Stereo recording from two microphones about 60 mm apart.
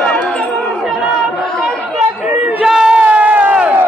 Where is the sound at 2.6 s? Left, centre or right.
Centre; by 3.5 s right.